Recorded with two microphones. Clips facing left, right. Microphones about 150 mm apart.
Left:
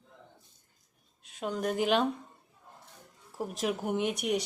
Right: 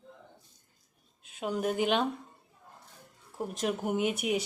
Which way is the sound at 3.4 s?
Centre (ahead or behind).